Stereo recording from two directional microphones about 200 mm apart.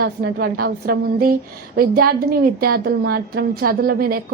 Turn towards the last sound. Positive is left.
turn(degrees=-45)  # may be behind; listen again after turning